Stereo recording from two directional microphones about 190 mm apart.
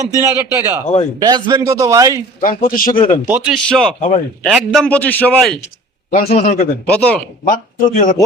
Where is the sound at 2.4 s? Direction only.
45° left (ahead or behind).